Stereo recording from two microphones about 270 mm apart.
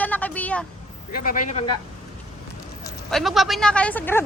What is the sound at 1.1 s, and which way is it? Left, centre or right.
Speech, left.